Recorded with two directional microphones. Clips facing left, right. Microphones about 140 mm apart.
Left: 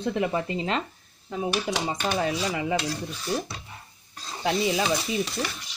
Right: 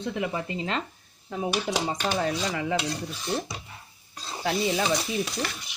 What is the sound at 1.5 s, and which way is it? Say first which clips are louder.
Speech: right 1 dB; 5° left (ahead or behind).